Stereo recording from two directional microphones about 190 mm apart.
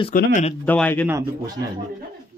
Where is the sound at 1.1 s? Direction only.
20° right (ahead or behind).